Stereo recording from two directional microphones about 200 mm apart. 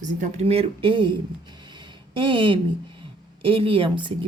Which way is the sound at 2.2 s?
25° right (ahead or behind).